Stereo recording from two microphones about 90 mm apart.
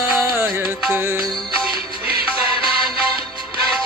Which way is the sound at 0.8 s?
15° right (ahead or behind).